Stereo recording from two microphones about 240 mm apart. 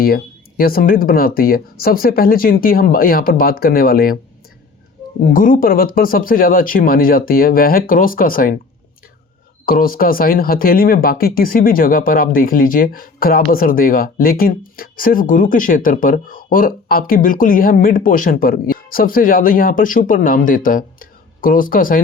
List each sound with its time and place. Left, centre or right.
0.0 s speech: left
5.3 s speech: left
9.6 s speech: left